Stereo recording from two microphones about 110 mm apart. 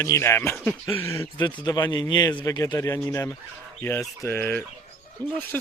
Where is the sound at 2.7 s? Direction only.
30° left (ahead or behind).